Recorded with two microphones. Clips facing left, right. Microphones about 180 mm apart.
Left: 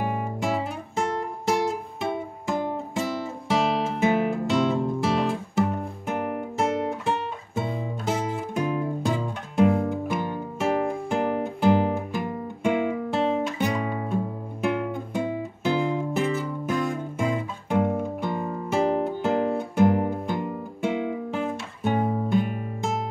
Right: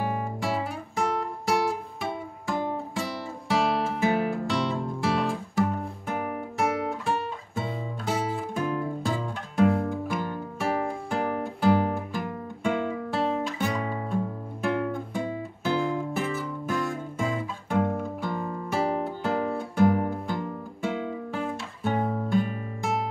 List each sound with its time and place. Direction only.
0.0 s guitar: 20° left (ahead or behind)
0.9 s music: 25° left (ahead or behind)
6.6 s guitar: 25° left (ahead or behind)
8.0 s music: 20° left (ahead or behind)